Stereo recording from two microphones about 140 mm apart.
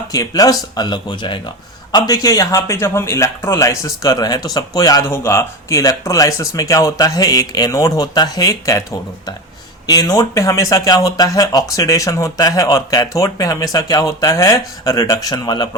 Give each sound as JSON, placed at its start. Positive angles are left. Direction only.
{"t": 0.1, "sound": "a man's voice", "side_deg": 25}
{"t": 9.8, "sound": "a man's voice", "side_deg": 30}